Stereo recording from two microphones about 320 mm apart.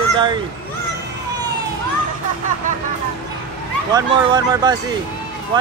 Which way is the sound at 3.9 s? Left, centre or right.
Centre.